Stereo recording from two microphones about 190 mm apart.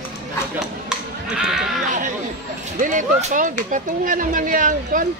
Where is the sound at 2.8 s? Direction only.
45° right (ahead or behind).